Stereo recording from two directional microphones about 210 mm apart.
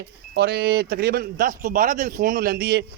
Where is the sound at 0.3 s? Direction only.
50° right (ahead or behind).